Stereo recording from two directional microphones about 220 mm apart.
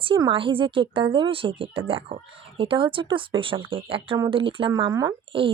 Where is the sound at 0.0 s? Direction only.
25° right (ahead or behind).